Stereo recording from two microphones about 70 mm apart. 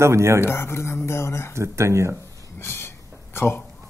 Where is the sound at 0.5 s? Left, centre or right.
Left.